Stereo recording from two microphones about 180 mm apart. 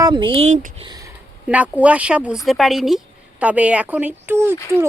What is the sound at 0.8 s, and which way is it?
Speech, 25° right (ahead or behind).